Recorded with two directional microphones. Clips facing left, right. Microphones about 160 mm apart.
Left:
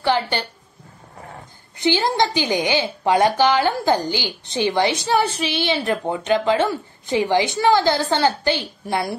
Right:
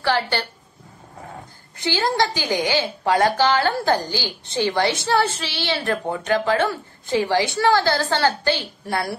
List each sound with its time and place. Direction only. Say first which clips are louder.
0.0 s a woman's voice: left 1 dB; 20° left (ahead or behind)
1.8 s a woman's voice: left 2 dB; 20° left (ahead or behind)